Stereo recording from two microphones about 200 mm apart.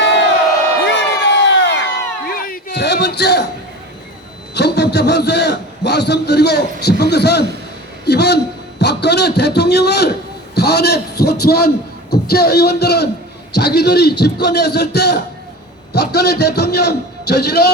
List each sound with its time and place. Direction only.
0.0 s crowd: 60° left (ahead or behind)
2.2 s a sound: 45° left (ahead or behind)
4.5 s a man's voice: 55° left (ahead or behind)